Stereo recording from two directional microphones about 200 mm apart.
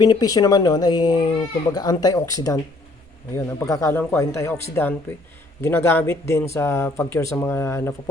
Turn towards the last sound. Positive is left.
turn(degrees=15)  # may be behind; listen again after turning